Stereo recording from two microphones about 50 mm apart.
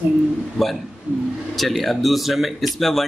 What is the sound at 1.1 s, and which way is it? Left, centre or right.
Speech, right.